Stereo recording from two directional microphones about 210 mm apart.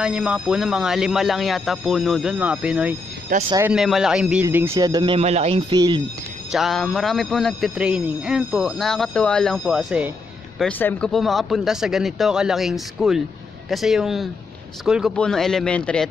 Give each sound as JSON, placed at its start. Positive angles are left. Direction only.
{"t": 0.0, "sound": "a man's voice", "side_deg": -5}
{"t": 3.3, "sound": "speech", "side_deg": -40}
{"t": 3.6, "sound": "a man's voice", "side_deg": 0}
{"t": 6.5, "sound": "a man's voice", "side_deg": 0}
{"t": 10.6, "sound": "a man's voice", "side_deg": 10}